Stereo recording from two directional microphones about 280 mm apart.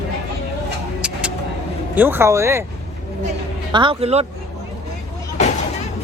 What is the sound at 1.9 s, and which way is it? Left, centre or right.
Speech, centre.